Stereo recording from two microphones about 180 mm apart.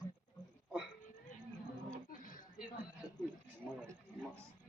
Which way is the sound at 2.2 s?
50° left (ahead or behind).